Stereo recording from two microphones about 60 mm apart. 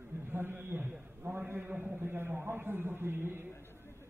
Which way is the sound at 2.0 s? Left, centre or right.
Right.